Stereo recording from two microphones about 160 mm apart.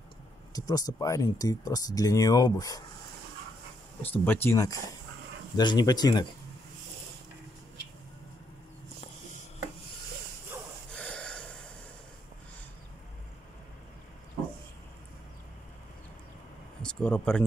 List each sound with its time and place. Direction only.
0.5 s speech: 25° left (ahead or behind)
4.0 s speech: 10° left (ahead or behind)
10.9 s wheeze: 5° left (ahead or behind)
16.8 s a sound: 5° left (ahead or behind)